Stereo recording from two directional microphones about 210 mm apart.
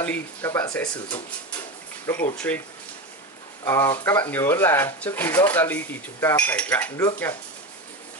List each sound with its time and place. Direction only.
0.0 s speech: 10° left (ahead or behind)
2.3 s speech: 5° left (ahead or behind)
3.6 s speech: 10° left (ahead or behind)